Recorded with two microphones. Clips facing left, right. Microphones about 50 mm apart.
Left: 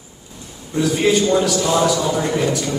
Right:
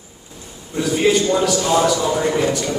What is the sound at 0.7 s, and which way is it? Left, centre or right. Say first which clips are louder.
A man's voice: even; centre.